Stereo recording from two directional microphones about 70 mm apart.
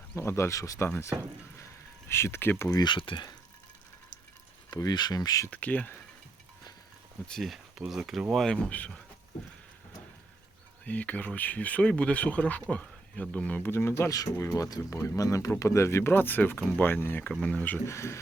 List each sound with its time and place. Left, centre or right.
0.2 s speech: left
2.0 s speech: left
2.6 s speech: left
4.7 s speech: left
5.5 s speech: left
7.3 s speech: centre
8.5 s speech: centre
10.8 s speech: left
13.6 s speech: left
14.1 s speech: left
17.8 s speech: left